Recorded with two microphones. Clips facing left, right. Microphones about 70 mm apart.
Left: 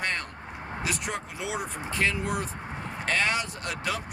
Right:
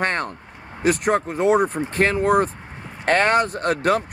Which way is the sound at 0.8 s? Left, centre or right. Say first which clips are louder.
Right 14 dB; right.